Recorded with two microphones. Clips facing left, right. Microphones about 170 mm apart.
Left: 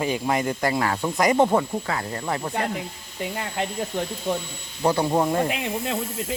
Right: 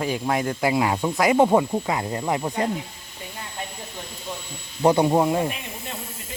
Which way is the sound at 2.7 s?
70° left (ahead or behind).